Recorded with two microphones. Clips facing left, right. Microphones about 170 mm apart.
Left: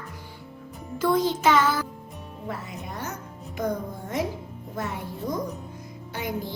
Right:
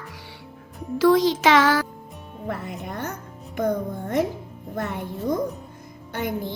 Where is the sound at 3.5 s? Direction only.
55° right (ahead or behind).